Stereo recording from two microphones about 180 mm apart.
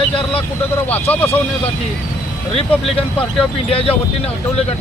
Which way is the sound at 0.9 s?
10° left (ahead or behind).